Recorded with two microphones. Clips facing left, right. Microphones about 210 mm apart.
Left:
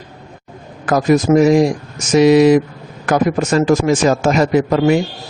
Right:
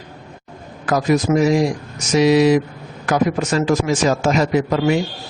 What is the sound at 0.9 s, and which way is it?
Speech, 45° left (ahead or behind).